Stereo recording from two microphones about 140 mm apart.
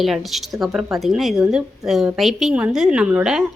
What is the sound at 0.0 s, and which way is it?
A woman's voice, centre (ahead or behind).